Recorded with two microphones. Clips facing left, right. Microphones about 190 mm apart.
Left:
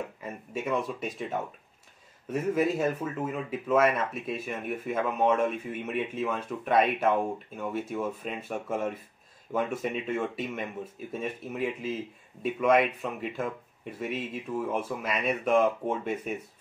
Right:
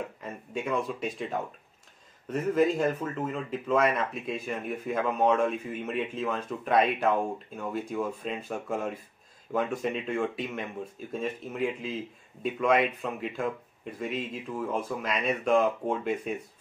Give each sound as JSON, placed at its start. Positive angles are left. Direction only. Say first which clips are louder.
{"t": 0.2, "sound": "speech", "louder": "even", "side_deg": 5}